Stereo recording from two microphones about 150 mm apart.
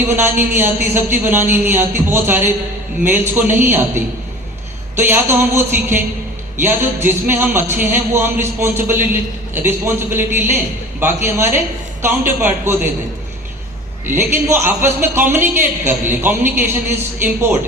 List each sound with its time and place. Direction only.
0.0 s a man's voice: 15° right (ahead or behind)
14.1 s a man's voice: 15° right (ahead or behind)